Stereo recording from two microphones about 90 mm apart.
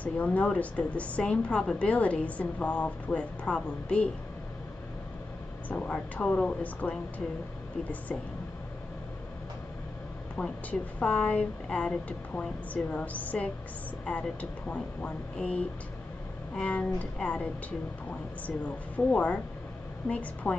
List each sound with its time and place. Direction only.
0.0 s a woman's voice: 15° left (ahead or behind)
5.7 s a woman's voice: 15° left (ahead or behind)
10.3 s a woman's voice: 15° left (ahead or behind)
18.9 s a woman's voice: 15° left (ahead or behind)